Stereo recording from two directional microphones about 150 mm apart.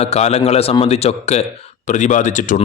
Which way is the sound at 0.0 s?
45° left (ahead or behind).